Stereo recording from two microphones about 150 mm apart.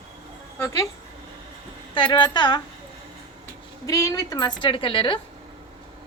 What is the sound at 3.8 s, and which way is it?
A woman's voice, 25° left (ahead or behind).